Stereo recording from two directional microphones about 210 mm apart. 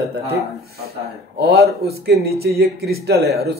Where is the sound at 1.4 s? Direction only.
50° right (ahead or behind).